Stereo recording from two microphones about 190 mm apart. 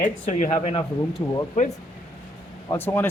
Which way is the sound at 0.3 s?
40° left (ahead or behind).